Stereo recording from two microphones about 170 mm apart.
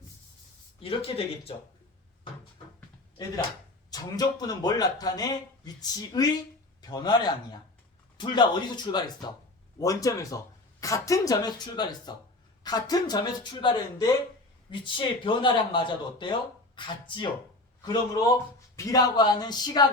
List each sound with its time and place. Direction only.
0.8 s speech: 35° left (ahead or behind)
3.9 s speech: 20° left (ahead or behind)